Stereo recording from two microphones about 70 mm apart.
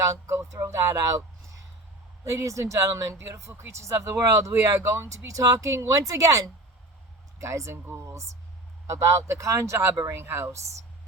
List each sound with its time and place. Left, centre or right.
0.0 s speech: right
9.7 s speech: right